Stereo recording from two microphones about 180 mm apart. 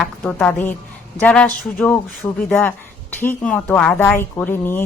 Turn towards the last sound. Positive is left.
turn(degrees=10)  # may be behind; listen again after turning